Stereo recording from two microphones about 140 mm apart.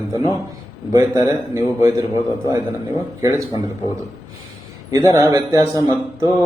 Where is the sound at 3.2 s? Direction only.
20° right (ahead or behind).